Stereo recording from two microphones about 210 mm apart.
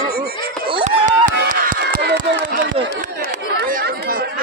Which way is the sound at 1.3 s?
40° right (ahead or behind).